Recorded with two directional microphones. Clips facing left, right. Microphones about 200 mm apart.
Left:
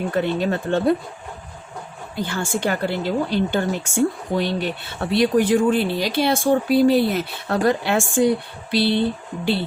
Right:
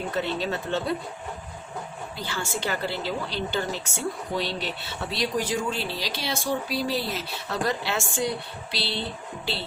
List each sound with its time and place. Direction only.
0.1 s speech: 55° left (ahead or behind)
2.1 s speech: 50° left (ahead or behind)